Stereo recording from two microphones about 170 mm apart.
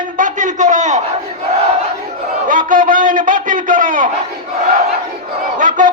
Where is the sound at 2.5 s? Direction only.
50° right (ahead or behind).